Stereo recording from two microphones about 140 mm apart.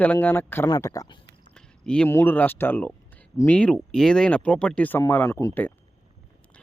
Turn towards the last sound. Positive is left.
turn(degrees=15)  # may be behind; listen again after turning